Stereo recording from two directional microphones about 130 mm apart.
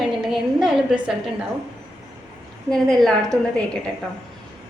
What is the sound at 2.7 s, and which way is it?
Speech, 5° left (ahead or behind).